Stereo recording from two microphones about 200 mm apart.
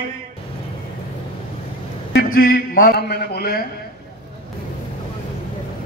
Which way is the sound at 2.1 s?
50° left (ahead or behind).